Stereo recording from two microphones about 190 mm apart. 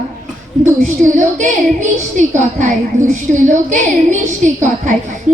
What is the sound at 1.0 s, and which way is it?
A woman's voice, 40° right (ahead or behind).